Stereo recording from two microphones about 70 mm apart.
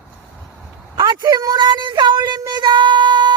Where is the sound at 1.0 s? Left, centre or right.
Right.